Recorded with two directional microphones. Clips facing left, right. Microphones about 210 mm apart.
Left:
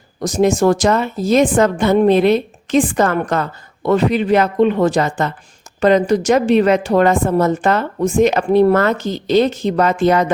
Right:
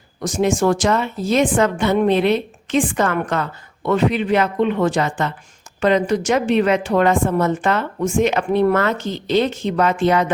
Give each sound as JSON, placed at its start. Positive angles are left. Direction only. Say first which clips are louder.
{"t": 0.2, "sound": "a woman's voice", "louder": "left 4 dB", "side_deg": 40}